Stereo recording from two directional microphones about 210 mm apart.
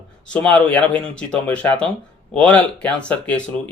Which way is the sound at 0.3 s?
5° left (ahead or behind).